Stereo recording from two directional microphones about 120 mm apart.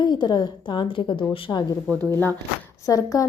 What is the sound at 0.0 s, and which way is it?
A woman's voice, 40° left (ahead or behind).